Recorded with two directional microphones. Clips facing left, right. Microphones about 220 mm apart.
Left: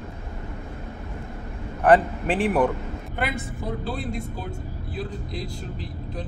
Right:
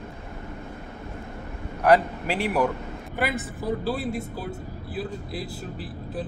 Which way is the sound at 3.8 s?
5° right (ahead or behind).